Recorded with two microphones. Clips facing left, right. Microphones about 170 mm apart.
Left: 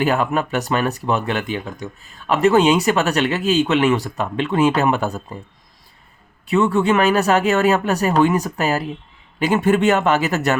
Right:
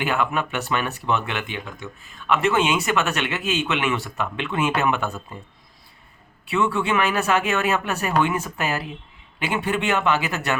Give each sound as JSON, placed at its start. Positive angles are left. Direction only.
{"t": 0.0, "sound": "speech", "side_deg": 40}
{"t": 6.5, "sound": "speech", "side_deg": 40}